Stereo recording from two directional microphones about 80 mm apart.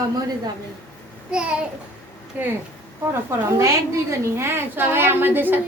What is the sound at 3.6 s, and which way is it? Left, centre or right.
A woman's voice, right.